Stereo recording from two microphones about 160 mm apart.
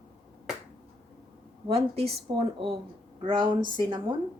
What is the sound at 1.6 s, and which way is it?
A woman's voice, 40° right (ahead or behind).